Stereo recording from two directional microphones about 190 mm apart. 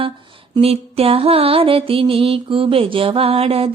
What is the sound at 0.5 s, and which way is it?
Music, 30° right (ahead or behind).